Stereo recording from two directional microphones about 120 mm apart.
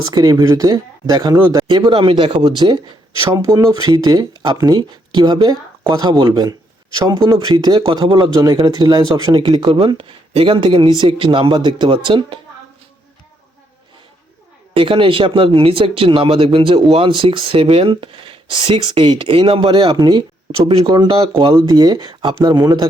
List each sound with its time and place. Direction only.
0.0 s speech: 35° right (ahead or behind)
1.6 s speech: 40° right (ahead or behind)
3.3 s speech: 25° right (ahead or behind); by 12.4 s 45° right (ahead or behind)
14.7 s speech: 45° right (ahead or behind)
19.9 s speech: 35° right (ahead or behind)